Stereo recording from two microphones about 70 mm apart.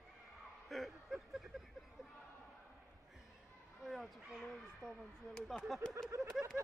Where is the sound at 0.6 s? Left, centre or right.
Centre.